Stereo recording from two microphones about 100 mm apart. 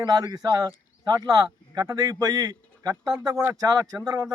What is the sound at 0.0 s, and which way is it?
A man's voice, 45° right (ahead or behind).